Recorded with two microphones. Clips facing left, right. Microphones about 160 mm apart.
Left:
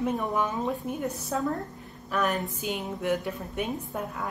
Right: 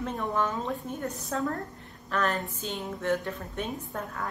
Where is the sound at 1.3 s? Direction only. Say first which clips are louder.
Left 1 dB; centre (ahead or behind).